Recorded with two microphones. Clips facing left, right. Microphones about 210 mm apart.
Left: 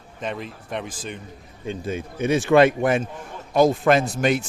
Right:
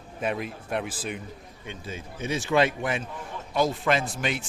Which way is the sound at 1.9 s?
60° left (ahead or behind).